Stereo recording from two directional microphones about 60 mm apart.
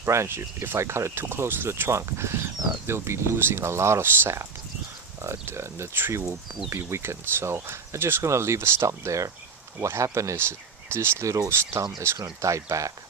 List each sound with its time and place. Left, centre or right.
0.0 s speech: right
12.4 s speech: right